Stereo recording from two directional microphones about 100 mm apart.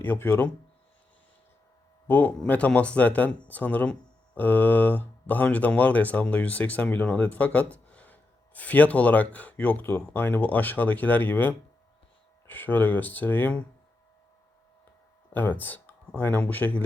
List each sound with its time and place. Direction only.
0.0 s speech: 20° left (ahead or behind)
2.0 s speech: 15° left (ahead or behind)
15.3 s speech: 20° left (ahead or behind)